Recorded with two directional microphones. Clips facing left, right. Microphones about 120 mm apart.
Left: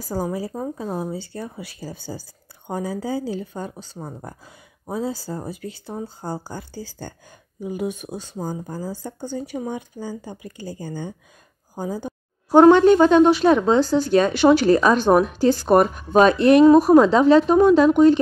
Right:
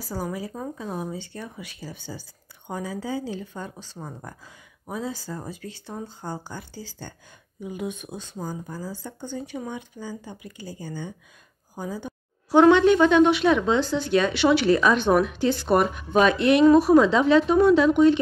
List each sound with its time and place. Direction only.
0.0 s a woman's voice: 40° left (ahead or behind)
7.6 s a woman's voice: 35° left (ahead or behind)